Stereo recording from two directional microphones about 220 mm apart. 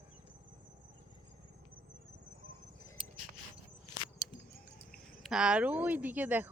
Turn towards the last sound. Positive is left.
turn(degrees=-10)  # may be behind; listen again after turning